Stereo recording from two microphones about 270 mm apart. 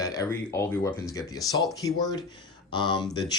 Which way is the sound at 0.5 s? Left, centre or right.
Centre.